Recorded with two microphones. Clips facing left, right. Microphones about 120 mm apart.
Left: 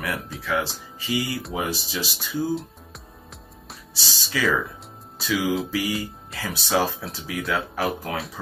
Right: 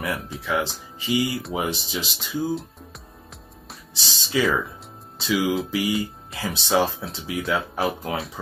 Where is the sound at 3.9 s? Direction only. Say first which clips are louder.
Right 5 dB; 25° right (ahead or behind).